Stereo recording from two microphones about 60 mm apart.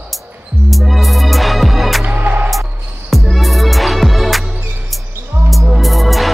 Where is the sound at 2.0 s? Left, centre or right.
Right.